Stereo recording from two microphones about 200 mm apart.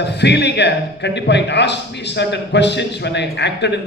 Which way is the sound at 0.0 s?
60° left (ahead or behind).